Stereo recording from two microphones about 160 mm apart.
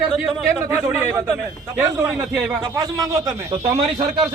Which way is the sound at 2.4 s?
10° right (ahead or behind).